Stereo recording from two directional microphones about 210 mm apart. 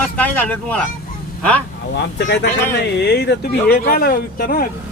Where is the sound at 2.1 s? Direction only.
55° left (ahead or behind).